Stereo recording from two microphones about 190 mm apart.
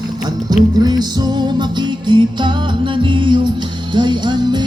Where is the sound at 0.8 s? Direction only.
20° right (ahead or behind).